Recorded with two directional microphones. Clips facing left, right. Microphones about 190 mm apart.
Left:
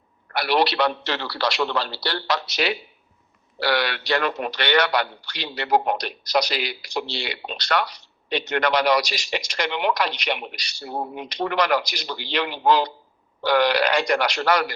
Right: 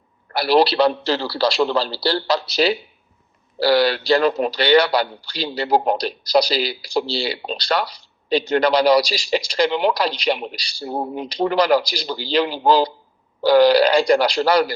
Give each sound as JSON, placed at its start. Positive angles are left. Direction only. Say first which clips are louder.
{"t": 0.3, "sound": "a man's voice", "louder": "right 5 dB", "side_deg": -30}